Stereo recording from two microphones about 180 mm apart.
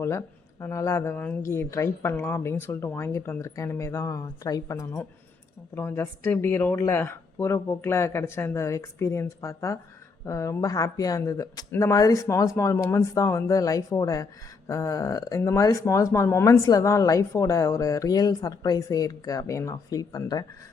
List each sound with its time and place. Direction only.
0.0 s speech: 15° left (ahead or behind)